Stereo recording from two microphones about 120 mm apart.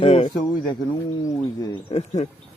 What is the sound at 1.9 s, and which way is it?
Speech, 60° left (ahead or behind).